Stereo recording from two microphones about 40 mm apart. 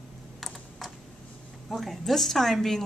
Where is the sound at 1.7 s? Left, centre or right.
Centre.